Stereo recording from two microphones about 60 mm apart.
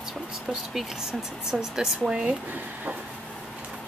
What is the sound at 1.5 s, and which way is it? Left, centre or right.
Speech, centre.